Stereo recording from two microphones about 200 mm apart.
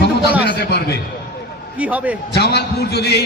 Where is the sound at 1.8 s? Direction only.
5° right (ahead or behind).